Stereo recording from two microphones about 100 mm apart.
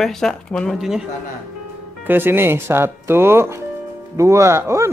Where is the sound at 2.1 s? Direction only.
20° right (ahead or behind).